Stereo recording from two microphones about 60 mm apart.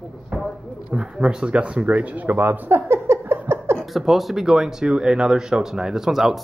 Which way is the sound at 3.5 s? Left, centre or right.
Right.